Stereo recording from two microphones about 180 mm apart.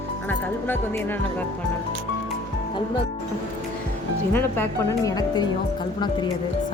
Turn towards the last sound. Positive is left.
turn(degrees=20)  # may be behind; listen again after turning